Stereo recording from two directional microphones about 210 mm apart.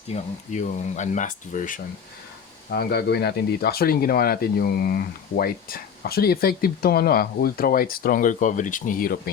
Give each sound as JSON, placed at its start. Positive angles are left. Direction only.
{"t": 0.1, "sound": "speech", "side_deg": 35}
{"t": 2.6, "sound": "speech", "side_deg": 50}